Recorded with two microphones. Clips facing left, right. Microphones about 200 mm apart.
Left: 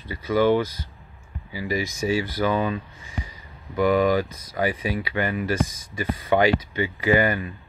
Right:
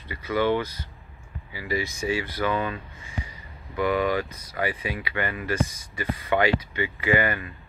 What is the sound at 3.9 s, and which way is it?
Speech, 40° left (ahead or behind).